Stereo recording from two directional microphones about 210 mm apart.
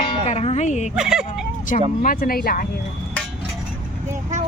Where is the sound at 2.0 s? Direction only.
45° left (ahead or behind).